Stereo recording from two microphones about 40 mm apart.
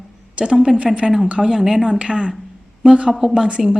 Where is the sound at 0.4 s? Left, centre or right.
Right.